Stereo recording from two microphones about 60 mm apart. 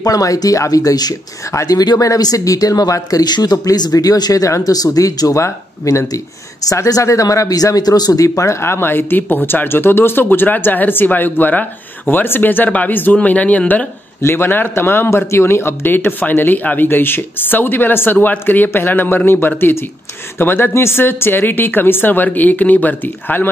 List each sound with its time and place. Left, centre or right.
0.0 s speech: left
14.2 s speech: left